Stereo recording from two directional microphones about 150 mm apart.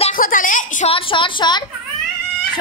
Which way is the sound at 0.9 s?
35° left (ahead or behind).